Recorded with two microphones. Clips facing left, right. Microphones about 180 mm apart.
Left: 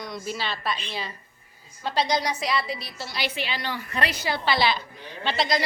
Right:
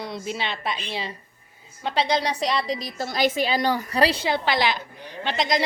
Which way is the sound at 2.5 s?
40° right (ahead or behind).